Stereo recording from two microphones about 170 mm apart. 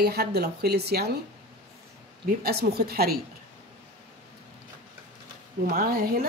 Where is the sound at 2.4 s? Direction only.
65° right (ahead or behind).